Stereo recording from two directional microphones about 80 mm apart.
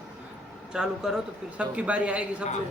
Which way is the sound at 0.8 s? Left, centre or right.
Centre.